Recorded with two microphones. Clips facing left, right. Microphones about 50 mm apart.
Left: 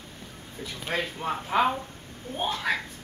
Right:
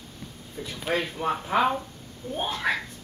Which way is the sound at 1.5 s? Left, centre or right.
Centre.